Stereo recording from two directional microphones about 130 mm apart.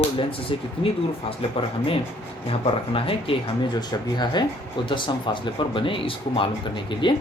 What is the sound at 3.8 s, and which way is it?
Speech, 35° left (ahead or behind).